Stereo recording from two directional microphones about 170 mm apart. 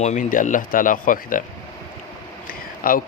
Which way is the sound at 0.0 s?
45° left (ahead or behind).